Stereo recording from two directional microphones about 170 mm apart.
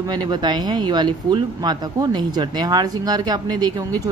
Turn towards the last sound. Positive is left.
turn(degrees=-25)  # may be behind; listen again after turning